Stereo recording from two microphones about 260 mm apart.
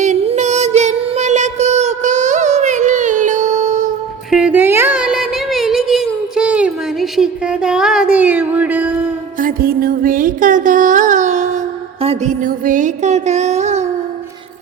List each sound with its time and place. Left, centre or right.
0.0 s music: right
4.3 s a sound: centre
9.4 s music: right